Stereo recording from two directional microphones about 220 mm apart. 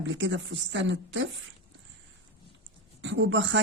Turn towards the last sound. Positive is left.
turn(degrees=-55)  # may be behind; listen again after turning